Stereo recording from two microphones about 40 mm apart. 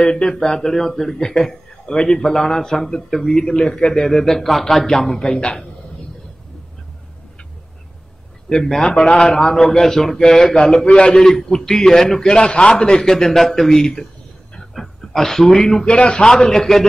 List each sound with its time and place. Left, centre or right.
0.0 s a man's voice: centre
8.5 s a man's voice: centre
10.5 s a man's voice: left
11.1 s a man's voice: centre
13.1 s a man's voice: centre
15.8 s a man's voice: left
16.3 s a man's voice: centre